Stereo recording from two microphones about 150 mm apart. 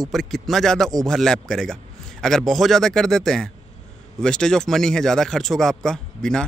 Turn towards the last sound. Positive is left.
turn(degrees=5)  # may be behind; listen again after turning